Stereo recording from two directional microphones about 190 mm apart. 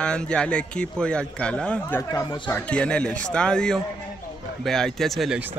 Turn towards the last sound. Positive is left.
turn(degrees=0)  # may be behind; listen again after turning